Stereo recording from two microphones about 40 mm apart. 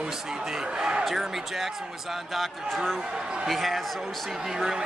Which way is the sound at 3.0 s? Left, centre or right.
Centre.